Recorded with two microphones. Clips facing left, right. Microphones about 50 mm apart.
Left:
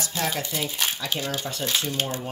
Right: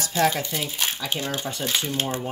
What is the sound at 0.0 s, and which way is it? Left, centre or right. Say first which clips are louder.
Speech: right 6 dB; centre.